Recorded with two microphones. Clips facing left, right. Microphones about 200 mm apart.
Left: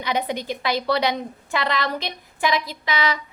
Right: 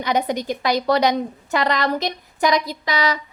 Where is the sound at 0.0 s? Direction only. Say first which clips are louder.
Right 4 dB; 45° right (ahead or behind).